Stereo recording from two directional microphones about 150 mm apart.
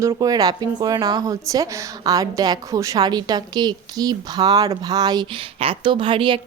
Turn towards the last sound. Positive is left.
turn(degrees=-35)  # may be behind; listen again after turning